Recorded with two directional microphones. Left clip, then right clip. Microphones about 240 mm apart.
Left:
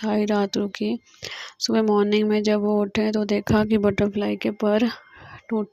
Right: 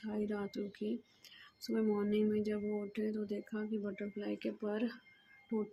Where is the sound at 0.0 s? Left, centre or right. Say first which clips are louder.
Left 18 dB; left.